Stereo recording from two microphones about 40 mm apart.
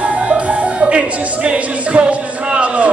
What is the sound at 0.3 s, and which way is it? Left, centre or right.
Music, right.